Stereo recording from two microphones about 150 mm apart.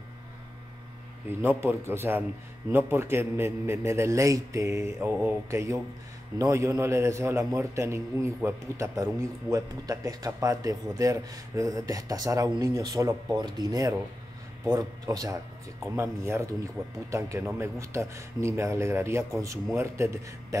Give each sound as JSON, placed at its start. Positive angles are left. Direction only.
{"t": 1.4, "sound": "a man's voice", "side_deg": -15}